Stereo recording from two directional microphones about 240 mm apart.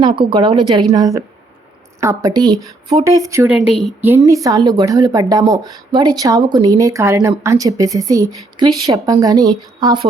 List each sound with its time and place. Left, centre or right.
0.0 s a woman's voice: centre
3.5 s a woman's voice: centre